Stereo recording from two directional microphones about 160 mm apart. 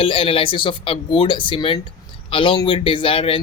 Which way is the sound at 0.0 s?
35° left (ahead or behind).